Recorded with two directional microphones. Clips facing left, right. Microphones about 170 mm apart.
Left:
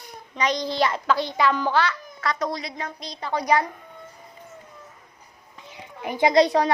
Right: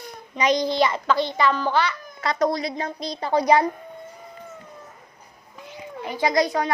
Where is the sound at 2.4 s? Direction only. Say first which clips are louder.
Right 6 dB; 40° right (ahead or behind).